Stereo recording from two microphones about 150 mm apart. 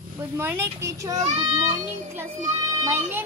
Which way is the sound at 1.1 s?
50° right (ahead or behind).